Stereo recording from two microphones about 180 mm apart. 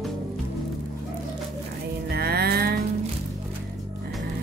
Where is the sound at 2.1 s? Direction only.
60° right (ahead or behind).